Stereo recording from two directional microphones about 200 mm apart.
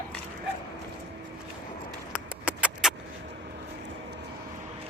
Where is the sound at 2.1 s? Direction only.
5° right (ahead or behind).